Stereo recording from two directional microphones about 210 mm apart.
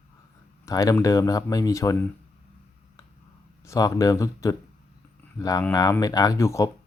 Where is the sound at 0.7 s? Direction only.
15° left (ahead or behind).